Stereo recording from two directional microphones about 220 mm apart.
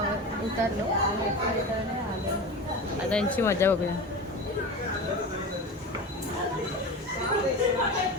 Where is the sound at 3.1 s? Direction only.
5° left (ahead or behind).